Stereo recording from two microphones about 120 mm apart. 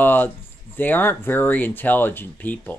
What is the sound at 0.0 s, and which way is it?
Speech, 15° left (ahead or behind).